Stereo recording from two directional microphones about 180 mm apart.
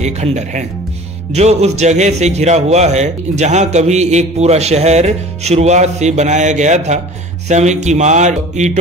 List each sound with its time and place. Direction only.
0.0 s a man's voice: 40° right (ahead or behind)